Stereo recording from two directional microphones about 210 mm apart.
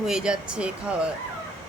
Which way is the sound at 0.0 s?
5° right (ahead or behind).